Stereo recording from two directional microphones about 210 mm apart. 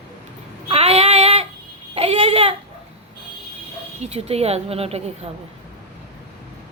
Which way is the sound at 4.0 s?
30° right (ahead or behind).